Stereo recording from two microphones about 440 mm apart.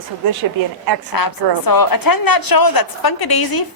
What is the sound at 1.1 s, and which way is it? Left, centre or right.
A woman's voice, left.